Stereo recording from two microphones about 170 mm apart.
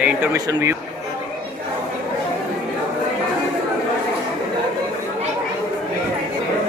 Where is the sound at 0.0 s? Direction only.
5° right (ahead or behind).